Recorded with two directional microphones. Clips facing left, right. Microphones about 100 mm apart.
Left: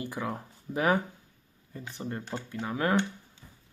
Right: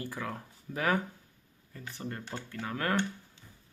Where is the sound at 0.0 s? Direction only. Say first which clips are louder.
Left 4 dB; 20° left (ahead or behind).